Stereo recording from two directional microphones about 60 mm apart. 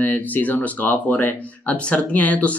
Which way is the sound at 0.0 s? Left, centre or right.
Left.